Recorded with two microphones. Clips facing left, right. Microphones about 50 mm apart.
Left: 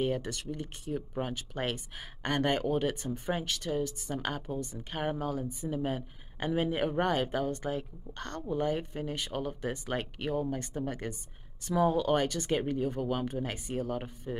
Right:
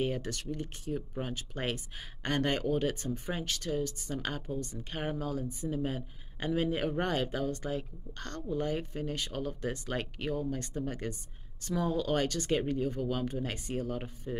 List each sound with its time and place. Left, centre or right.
0.0 s speech: left
0.5 s speech: centre
6.9 s speech: centre